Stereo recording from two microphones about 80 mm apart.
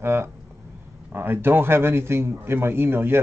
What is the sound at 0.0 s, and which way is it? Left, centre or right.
Speech, right.